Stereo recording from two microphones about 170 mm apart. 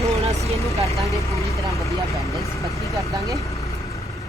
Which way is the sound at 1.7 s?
20° left (ahead or behind).